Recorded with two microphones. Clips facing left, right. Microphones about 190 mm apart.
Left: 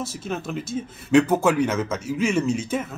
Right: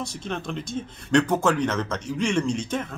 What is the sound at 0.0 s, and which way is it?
Speech, 5° left (ahead or behind).